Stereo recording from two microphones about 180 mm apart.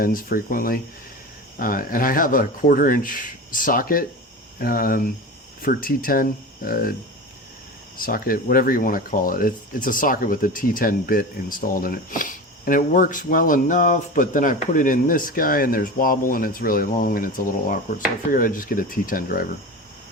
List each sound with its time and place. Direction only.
0.0 s speech: 55° left (ahead or behind)
7.9 s speech: 55° left (ahead or behind)